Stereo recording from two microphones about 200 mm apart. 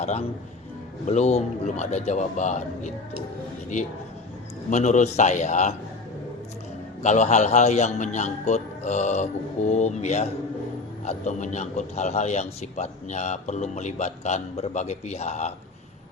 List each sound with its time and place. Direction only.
0.0 s a man's voice: 35° left (ahead or behind)
4.7 s a man's voice: 35° left (ahead or behind)
7.0 s a man's voice: 35° left (ahead or behind)